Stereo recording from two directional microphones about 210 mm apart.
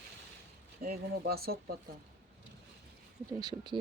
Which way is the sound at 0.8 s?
45° right (ahead or behind).